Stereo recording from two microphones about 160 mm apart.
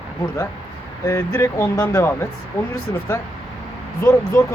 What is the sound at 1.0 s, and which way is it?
Speech, 15° left (ahead or behind).